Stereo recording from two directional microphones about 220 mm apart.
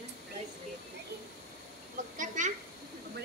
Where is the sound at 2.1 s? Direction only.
35° right (ahead or behind).